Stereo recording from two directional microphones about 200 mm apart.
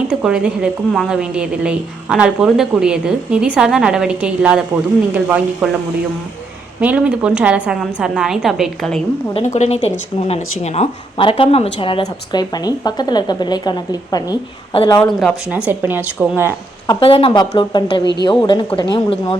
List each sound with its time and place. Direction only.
0.1 s a woman's voice: 5° right (ahead or behind)
6.7 s a woman's voice: 5° right (ahead or behind)
9.3 s speech: 35° left (ahead or behind)
15.0 s speech: centre (ahead or behind)
16.8 s speech: 20° left (ahead or behind)